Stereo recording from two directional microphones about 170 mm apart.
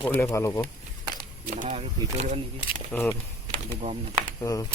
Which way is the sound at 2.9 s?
15° left (ahead or behind).